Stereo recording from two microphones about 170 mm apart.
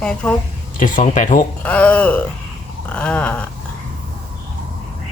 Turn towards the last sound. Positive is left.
turn(degrees=10)  # may be behind; listen again after turning